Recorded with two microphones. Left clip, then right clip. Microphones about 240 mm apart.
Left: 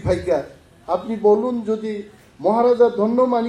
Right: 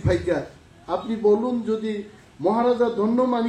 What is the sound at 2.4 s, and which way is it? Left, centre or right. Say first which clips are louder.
Speech: left 5 dB; left.